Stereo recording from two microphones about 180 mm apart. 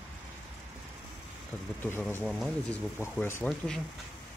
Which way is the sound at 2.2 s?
Centre (ahead or behind).